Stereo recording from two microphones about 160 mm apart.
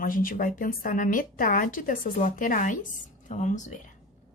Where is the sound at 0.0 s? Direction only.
60° left (ahead or behind).